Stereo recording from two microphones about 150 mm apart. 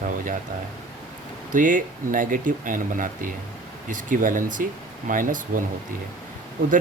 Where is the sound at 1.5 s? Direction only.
60° right (ahead or behind).